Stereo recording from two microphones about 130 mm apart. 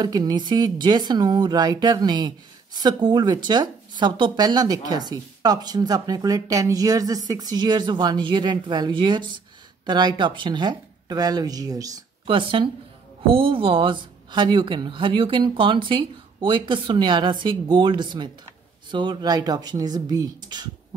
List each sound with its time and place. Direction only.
0.0 s speech: 35° right (ahead or behind)
12.3 s speech: 40° right (ahead or behind)